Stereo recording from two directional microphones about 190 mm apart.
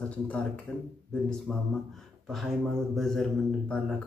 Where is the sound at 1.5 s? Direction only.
5° left (ahead or behind).